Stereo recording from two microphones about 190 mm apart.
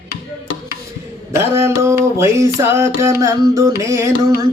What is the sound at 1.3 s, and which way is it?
Speech, 15° right (ahead or behind).